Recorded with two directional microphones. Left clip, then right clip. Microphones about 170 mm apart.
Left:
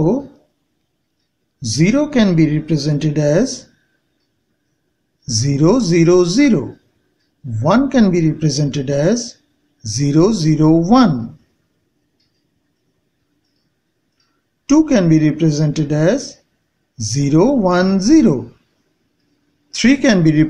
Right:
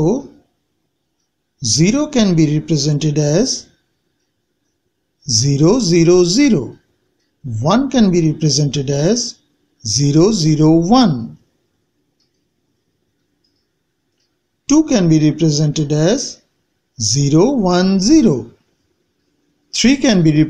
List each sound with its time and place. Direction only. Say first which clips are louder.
1.7 s speech: even; 25° right (ahead or behind)
5.2 s speech: right 1 dB; 25° right (ahead or behind)
7.5 s speech: left 1 dB; 25° right (ahead or behind)
14.7 s speech: even; 25° right (ahead or behind)
19.7 s speech: even; 25° right (ahead or behind)